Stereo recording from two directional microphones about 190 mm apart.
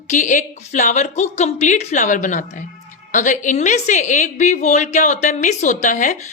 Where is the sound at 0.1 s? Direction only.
40° left (ahead or behind).